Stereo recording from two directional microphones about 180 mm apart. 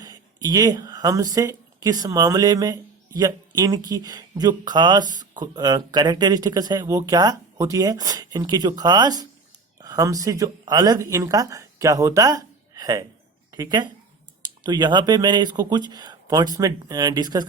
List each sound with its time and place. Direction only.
0.0 s speech: 20° right (ahead or behind)